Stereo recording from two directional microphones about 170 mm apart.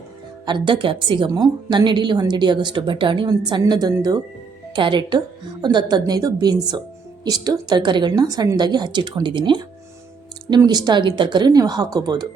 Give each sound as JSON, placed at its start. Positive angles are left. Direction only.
{"t": 0.4, "sound": "a woman's voice", "side_deg": -30}